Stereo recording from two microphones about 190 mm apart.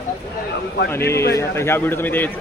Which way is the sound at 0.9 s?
15° left (ahead or behind).